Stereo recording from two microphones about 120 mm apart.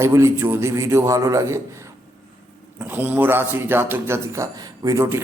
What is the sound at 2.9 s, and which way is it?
A man's voice, 15° right (ahead or behind).